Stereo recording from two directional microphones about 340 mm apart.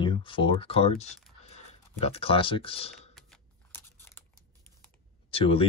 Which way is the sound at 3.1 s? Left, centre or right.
Centre.